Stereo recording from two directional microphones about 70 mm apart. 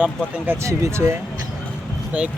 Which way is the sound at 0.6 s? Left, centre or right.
Right.